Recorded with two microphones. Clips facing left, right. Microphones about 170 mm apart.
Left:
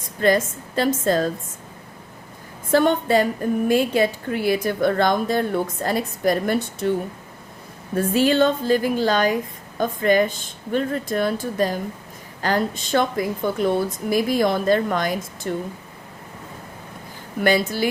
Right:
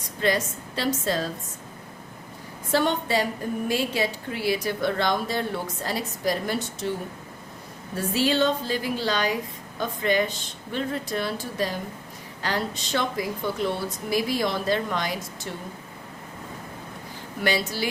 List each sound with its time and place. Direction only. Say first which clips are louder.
0.0 s a woman's voice: left 6 dB; 50° left (ahead or behind)
2.7 s a woman's voice: left 6 dB; 50° left (ahead or behind)
7.9 s a woman's voice: left 6 dB; 50° left (ahead or behind)
17.4 s a woman's voice: left 6 dB; 50° left (ahead or behind)